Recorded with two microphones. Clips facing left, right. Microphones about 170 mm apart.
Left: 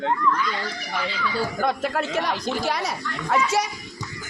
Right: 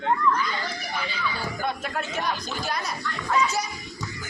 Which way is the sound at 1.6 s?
90° left.